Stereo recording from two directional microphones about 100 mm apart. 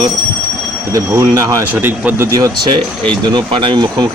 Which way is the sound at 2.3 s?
45° right (ahead or behind).